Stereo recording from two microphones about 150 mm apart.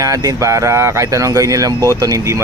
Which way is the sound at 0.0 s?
20° right (ahead or behind).